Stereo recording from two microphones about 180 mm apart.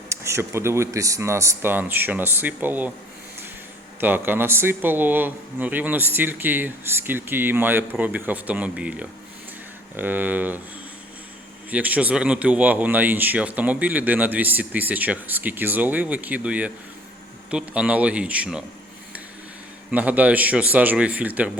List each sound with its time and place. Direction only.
0.1 s a man's voice: 15° right (ahead or behind)
4.0 s a man's voice: 10° right (ahead or behind)
11.7 s a man's voice: 10° right (ahead or behind)
19.9 s a man's voice: 10° right (ahead or behind)